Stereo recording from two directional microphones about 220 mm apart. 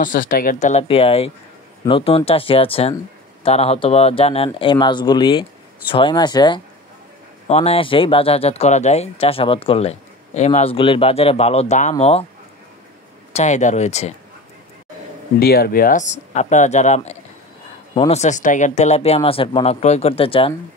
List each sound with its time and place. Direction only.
0.0 s speech: 40° left (ahead or behind)
13.3 s speech: 30° left (ahead or behind)
15.3 s speech: 45° left (ahead or behind); by 20.5 s 25° left (ahead or behind)